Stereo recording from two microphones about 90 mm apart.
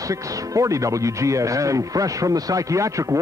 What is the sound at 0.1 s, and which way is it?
Speech, 35° right (ahead or behind).